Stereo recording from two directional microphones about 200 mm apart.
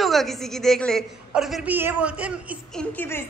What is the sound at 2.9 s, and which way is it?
Speech, 10° left (ahead or behind).